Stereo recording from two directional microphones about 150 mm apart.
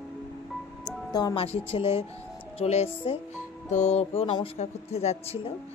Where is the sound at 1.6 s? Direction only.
40° left (ahead or behind).